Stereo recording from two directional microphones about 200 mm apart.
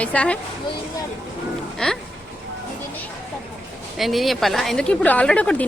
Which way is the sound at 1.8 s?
5° left (ahead or behind).